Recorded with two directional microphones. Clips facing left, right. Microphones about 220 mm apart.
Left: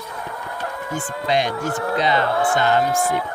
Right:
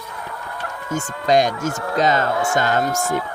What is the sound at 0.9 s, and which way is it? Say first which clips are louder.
Speech: right 5 dB; 45° right (ahead or behind).